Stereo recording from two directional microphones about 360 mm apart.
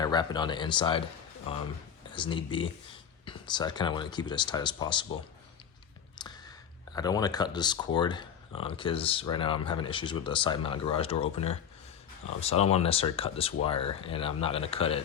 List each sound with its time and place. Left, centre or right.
0.0 s speech: centre
6.2 s clicking: centre
6.9 s speech: centre